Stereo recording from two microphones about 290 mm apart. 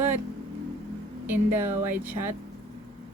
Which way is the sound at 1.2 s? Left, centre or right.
Centre.